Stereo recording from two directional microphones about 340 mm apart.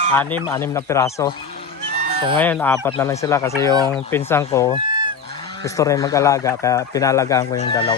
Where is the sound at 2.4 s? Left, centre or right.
Centre.